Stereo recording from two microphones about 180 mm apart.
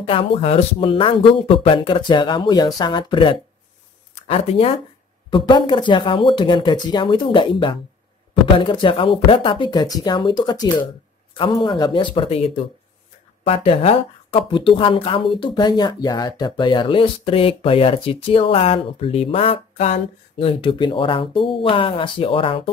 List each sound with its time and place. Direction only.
0.0 s speech: 30° left (ahead or behind)
13.4 s speech: 35° left (ahead or behind)